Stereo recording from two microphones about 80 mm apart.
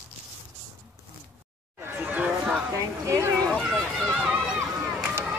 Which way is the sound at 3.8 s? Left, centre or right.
Centre.